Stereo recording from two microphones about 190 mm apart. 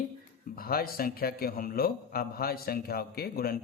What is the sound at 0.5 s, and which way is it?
A man's voice, 50° left (ahead or behind).